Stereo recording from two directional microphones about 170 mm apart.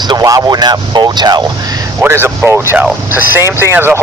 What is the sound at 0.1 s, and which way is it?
Speech, 20° right (ahead or behind).